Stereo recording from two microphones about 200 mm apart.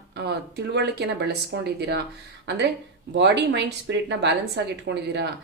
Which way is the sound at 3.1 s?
60° right (ahead or behind).